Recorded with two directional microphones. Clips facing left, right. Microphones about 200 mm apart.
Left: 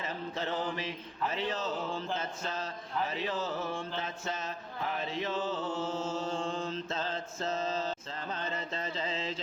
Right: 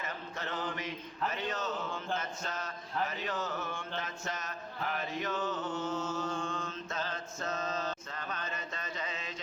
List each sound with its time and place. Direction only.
0.0 s speech: 30° left (ahead or behind)
2.1 s mantra: 30° left (ahead or behind)